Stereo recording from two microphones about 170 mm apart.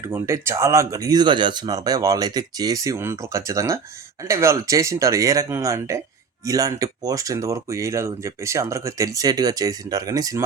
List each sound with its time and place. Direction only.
0.1 s speech: 15° right (ahead or behind)